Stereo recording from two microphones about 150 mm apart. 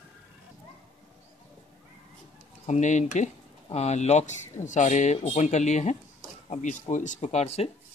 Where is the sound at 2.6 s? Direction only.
50° left (ahead or behind).